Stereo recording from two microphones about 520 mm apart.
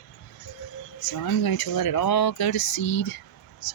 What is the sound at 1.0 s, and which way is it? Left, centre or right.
Speech, left.